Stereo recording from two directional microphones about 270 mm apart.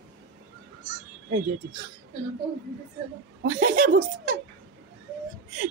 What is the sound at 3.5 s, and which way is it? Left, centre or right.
Speech, right.